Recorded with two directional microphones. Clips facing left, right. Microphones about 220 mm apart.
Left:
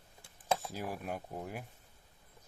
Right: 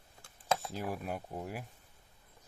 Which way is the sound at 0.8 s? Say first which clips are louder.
Right 1 dB; centre (ahead or behind).